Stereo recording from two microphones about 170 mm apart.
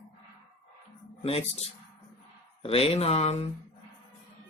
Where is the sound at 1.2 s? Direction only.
35° left (ahead or behind).